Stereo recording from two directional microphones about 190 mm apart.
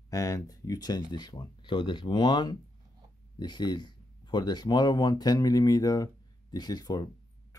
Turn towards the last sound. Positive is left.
turn(degrees=20)  # may be behind; listen again after turning